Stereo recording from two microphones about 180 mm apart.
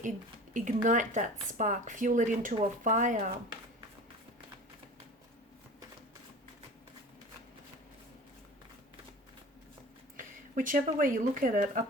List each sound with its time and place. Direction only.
0.5 s speech: 45° right (ahead or behind)
10.2 s speech: 50° right (ahead or behind)